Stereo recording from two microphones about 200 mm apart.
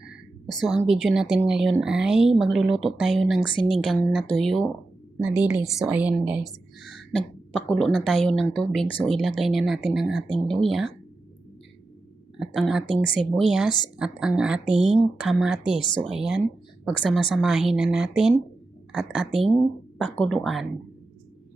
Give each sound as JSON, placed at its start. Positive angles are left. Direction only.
{"t": 0.9, "sound": "speech", "side_deg": -5}
{"t": 3.4, "sound": "a woman's voice", "side_deg": 25}
{"t": 3.7, "sound": "a woman's voice", "side_deg": 0}
{"t": 12.4, "sound": "speech", "side_deg": 0}
{"t": 13.7, "sound": "a woman's voice", "side_deg": 20}
{"t": 14.0, "sound": "speech", "side_deg": -5}